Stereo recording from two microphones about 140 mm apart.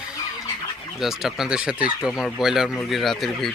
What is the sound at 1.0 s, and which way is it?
Speech, centre (ahead or behind).